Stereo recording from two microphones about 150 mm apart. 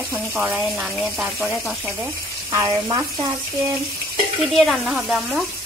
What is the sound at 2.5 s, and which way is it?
Speech, 20° right (ahead or behind).